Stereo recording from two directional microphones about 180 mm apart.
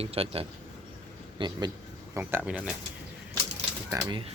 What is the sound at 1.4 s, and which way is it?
Speech, 20° right (ahead or behind).